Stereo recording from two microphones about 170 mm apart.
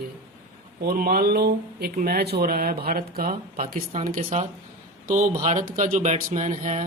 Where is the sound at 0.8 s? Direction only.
60° right (ahead or behind).